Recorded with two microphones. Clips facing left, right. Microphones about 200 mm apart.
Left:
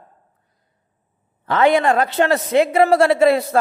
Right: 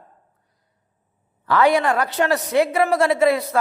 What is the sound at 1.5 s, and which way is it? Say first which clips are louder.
A man's voice: left 2 dB; 20° left (ahead or behind).